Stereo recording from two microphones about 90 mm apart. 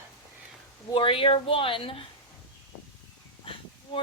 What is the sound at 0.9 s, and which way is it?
Speech, 80° left.